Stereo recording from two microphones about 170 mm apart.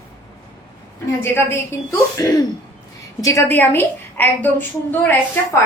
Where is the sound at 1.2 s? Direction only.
15° left (ahead or behind).